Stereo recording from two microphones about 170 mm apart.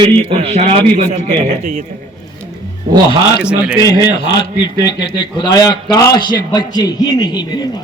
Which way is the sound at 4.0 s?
25° left (ahead or behind).